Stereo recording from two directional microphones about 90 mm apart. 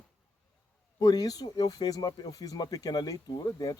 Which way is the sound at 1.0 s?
45° left (ahead or behind).